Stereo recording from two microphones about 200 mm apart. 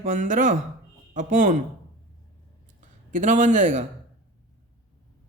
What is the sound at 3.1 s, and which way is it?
Speech, 40° right (ahead or behind).